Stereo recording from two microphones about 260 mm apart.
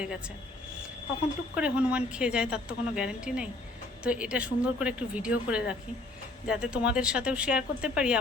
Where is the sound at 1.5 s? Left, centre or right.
Centre.